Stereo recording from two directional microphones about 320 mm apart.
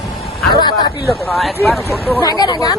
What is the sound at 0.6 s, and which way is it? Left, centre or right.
Speech, centre.